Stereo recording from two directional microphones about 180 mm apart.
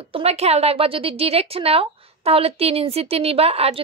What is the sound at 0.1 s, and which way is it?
A woman's voice, 35° right (ahead or behind).